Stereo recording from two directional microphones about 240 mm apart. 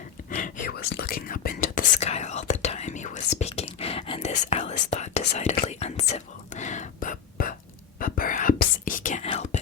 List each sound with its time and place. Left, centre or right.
0.3 s whispering: left